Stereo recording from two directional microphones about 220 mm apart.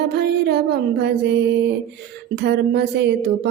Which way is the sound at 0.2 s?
50° right (ahead or behind).